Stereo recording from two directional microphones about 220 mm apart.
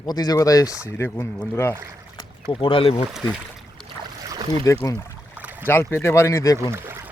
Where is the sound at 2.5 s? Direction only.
25° left (ahead or behind).